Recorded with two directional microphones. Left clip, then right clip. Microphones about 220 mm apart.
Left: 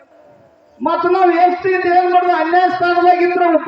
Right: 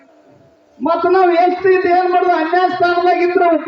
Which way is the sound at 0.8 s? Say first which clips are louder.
Right 1 dB; 30° left (ahead or behind).